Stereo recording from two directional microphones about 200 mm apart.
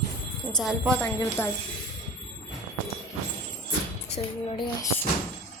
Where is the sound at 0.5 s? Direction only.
Centre (ahead or behind).